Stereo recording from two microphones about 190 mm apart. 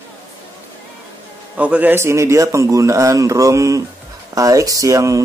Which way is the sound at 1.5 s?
5° right (ahead or behind).